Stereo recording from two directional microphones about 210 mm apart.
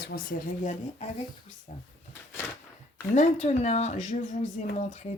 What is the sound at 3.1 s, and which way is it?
Speech, 35° left (ahead or behind).